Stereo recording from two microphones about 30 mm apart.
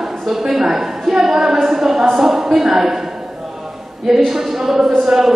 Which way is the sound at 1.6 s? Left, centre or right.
Centre.